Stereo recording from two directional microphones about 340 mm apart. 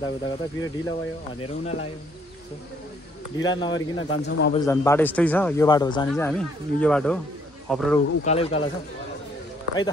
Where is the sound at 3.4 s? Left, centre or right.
Centre.